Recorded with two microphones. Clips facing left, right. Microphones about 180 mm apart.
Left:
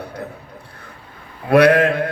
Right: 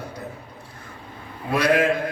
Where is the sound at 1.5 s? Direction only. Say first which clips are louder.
Left 7 dB; 60° left (ahead or behind).